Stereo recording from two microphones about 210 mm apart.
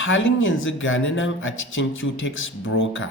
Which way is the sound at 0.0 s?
65° left (ahead or behind).